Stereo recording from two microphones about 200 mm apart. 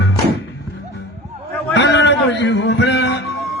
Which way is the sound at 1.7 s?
60° left (ahead or behind).